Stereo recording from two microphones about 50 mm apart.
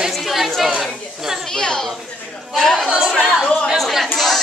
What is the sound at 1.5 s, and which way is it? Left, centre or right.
Speech, centre.